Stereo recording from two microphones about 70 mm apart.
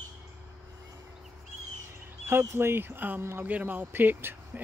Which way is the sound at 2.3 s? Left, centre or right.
Right.